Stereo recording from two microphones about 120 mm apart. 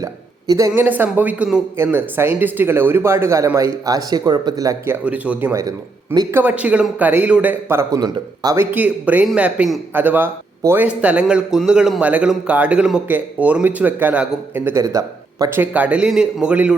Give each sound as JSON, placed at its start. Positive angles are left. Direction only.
{"t": 0.0, "sound": "hiccup", "side_deg": -30}
{"t": 0.8, "sound": "a man's voice", "side_deg": -15}
{"t": 5.0, "sound": "a man's voice", "side_deg": -10}
{"t": 5.5, "sound": "a man's voice", "side_deg": -25}
{"t": 6.3, "sound": "a man's voice", "side_deg": -10}
{"t": 7.9, "sound": "speech", "side_deg": -35}
{"t": 8.5, "sound": "a man's voice", "side_deg": -15}